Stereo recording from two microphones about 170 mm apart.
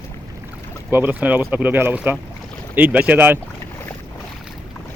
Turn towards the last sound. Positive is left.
turn(degrees=-10)  # may be behind; listen again after turning